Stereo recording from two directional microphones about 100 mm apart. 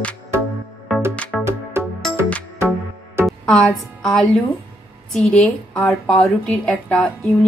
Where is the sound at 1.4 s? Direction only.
25° right (ahead or behind).